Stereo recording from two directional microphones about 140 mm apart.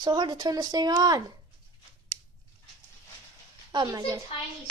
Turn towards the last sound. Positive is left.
turn(degrees=-25)  # may be behind; listen again after turning